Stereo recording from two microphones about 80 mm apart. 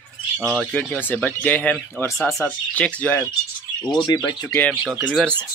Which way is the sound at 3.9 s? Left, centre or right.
Left.